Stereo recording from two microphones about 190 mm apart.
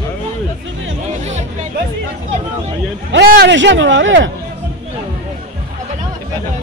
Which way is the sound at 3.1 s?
70° right (ahead or behind).